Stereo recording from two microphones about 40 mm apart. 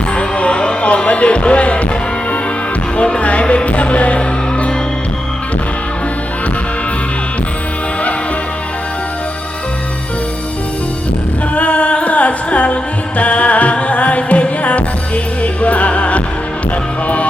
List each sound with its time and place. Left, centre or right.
0.2 s music: left
3.0 s music: left
3.4 s music: left
3.7 s music: left
11.5 s music: left